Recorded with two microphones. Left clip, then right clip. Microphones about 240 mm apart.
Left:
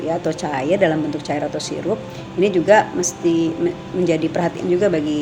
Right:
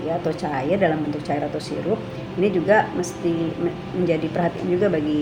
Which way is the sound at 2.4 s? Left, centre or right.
Left.